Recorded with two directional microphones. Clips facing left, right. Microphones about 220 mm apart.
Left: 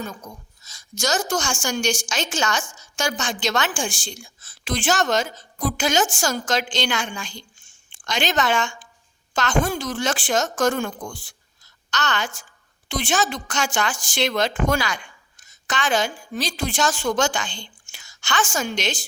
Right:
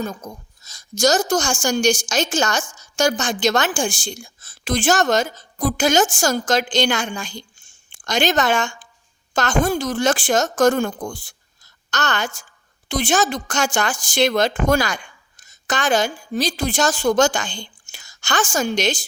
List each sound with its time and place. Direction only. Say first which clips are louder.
0.0 s a woman's voice: right 5 dB; 40° right (ahead or behind)